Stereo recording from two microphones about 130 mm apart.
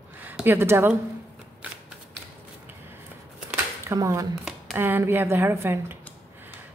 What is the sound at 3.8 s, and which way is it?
Speech, 25° right (ahead or behind).